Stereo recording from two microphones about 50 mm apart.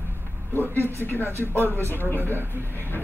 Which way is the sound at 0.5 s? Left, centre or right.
Left.